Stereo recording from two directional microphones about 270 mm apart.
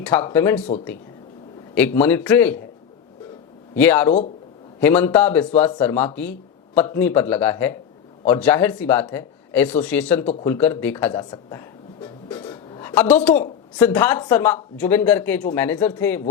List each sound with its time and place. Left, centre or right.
0.0 s speech: centre
1.7 s speech: centre
3.8 s speech: centre
12.3 s a sound: centre
13.7 s speech: centre